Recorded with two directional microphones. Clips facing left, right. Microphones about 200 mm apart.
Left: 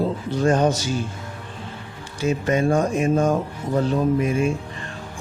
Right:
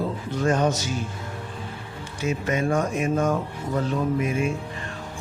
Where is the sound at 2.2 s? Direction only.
35° left (ahead or behind).